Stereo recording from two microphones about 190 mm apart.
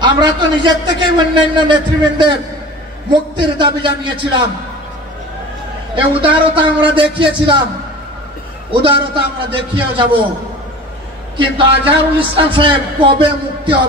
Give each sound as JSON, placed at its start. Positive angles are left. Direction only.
{"t": 0.0, "sound": "a man's voice", "side_deg": -25}
{"t": 3.3, "sound": "a man's voice", "side_deg": -25}
{"t": 5.9, "sound": "a man's voice", "side_deg": -25}
{"t": 8.7, "sound": "a man's voice", "side_deg": -25}
{"t": 11.3, "sound": "a man's voice", "side_deg": -25}